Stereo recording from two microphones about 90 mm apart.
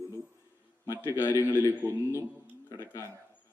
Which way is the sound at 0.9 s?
25° left (ahead or behind).